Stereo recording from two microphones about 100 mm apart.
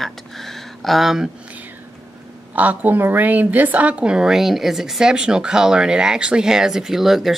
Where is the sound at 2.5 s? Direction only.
15° right (ahead or behind).